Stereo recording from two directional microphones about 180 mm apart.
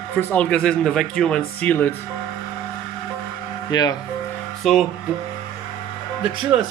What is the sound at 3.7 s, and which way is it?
Speech, 20° left (ahead or behind).